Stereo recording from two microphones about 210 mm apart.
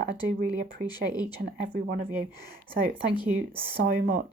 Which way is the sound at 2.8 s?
45° right (ahead or behind).